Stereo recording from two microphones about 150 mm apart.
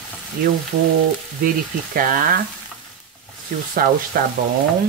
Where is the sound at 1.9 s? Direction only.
70° right (ahead or behind).